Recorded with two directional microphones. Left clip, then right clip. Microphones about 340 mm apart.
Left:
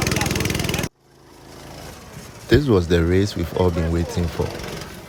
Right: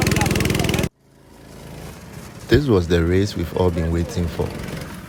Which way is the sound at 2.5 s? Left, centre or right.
Centre.